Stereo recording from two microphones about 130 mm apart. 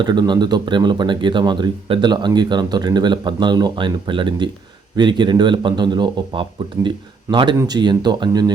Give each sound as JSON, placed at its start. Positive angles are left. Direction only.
{"t": 0.0, "sound": "speech", "side_deg": -35}